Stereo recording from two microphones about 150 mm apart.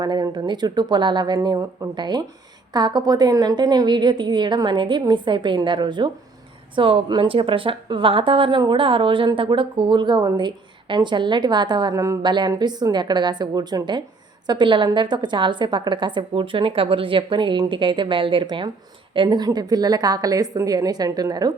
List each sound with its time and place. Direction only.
0.0 s a woman's voice: 25° right (ahead or behind)